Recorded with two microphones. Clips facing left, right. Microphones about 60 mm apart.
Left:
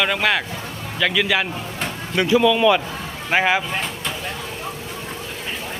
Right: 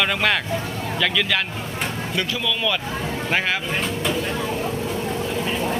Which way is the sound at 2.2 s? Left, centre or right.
Centre.